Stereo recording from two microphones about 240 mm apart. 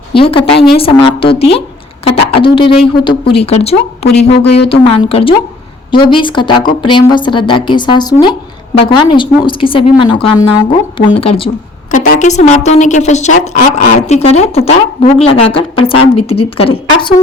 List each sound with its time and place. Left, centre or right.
0.1 s a woman's voice: left